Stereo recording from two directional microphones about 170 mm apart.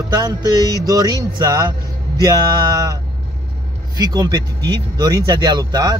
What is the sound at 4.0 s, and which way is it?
Speech, 20° right (ahead or behind).